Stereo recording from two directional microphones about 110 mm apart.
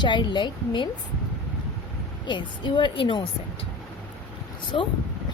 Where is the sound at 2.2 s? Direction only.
45° left (ahead or behind).